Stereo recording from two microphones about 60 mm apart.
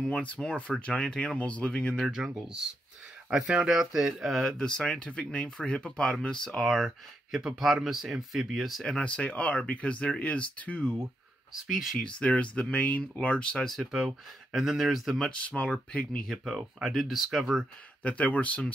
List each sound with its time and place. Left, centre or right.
0.0 s speech: centre
2.0 s speech: centre
4.6 s speech: centre
6.6 s speech: centre
8.8 s speech: centre
11.5 s speech: centre
12.0 s speech: centre
13.9 s speech: centre
15.3 s speech: left
16.3 s speech: centre
18.0 s speech: left